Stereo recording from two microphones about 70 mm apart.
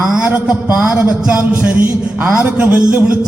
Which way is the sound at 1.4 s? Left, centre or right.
Right.